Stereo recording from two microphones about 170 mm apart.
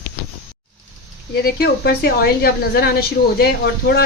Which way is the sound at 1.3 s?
65° left (ahead or behind).